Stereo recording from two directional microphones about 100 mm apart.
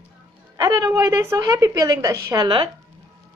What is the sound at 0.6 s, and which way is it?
A woman's voice, 40° right (ahead or behind).